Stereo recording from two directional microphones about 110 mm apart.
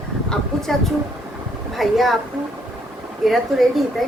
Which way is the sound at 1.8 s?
Centre (ahead or behind).